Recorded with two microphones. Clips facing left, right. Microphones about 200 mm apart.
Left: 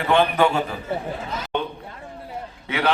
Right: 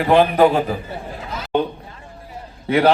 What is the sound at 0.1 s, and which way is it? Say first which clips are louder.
Speech: right 5 dB; 40° right (ahead or behind).